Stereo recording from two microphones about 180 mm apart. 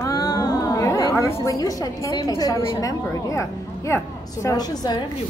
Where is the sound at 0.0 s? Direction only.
20° left (ahead or behind).